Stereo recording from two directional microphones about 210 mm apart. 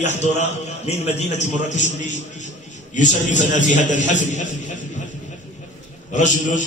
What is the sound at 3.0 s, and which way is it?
A man's voice, 35° left (ahead or behind).